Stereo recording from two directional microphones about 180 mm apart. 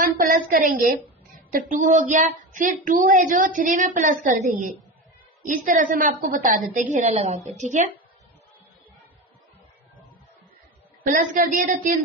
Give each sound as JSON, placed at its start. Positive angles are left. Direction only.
{"t": 0.0, "sound": "a sound", "side_deg": -50}
{"t": 1.5, "sound": "speech", "side_deg": -45}
{"t": 11.1, "sound": "speech", "side_deg": -50}